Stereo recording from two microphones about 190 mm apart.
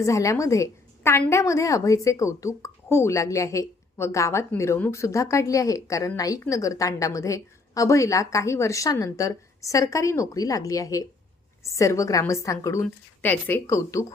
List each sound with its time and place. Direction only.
0.0 s a woman's voice: 15° left (ahead or behind)